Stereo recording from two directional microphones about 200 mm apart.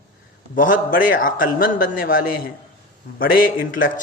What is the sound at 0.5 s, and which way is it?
A man's voice, 40° left (ahead or behind).